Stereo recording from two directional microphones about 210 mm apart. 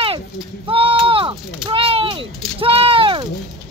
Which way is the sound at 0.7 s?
25° right (ahead or behind).